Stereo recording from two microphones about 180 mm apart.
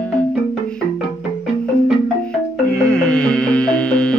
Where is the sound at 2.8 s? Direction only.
5° left (ahead or behind).